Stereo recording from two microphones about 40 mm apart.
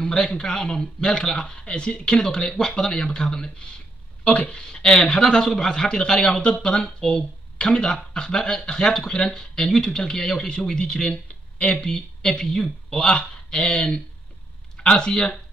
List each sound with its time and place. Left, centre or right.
0.1 s a man's voice: centre
4.2 s a man's voice: left
5.2 s a man's voice: centre